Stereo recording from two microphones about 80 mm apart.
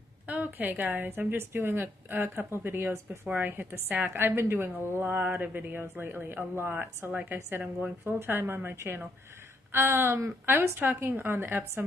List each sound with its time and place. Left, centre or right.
0.3 s a woman's voice: right